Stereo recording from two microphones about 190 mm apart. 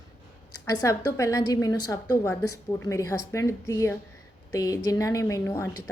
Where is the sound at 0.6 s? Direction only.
15° left (ahead or behind).